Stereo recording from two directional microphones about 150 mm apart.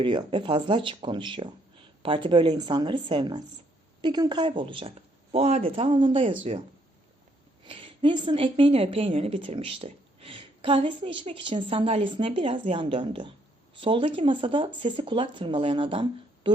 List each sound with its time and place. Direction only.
0.0 s speech: 35° right (ahead or behind)
7.6 s a woman's voice: 35° right (ahead or behind)